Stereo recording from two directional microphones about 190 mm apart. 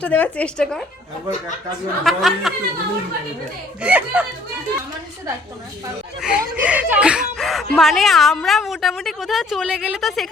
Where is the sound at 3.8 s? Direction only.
5° right (ahead or behind).